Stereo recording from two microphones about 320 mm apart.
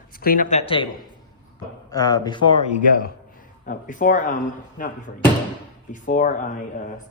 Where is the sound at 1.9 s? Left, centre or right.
Centre.